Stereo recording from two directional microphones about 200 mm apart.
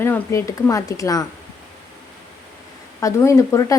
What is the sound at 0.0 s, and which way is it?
A woman's voice, 10° left (ahead or behind).